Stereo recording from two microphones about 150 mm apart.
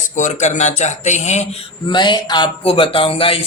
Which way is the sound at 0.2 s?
50° left (ahead or behind).